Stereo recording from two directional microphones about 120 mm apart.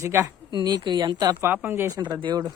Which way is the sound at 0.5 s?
35° right (ahead or behind).